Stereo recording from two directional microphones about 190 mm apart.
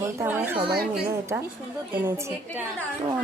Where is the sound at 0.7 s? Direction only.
55° right (ahead or behind).